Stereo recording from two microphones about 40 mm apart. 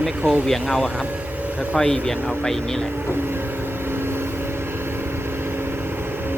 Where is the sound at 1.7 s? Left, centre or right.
Centre.